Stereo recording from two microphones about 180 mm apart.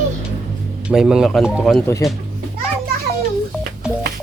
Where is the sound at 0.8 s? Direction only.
5° right (ahead or behind).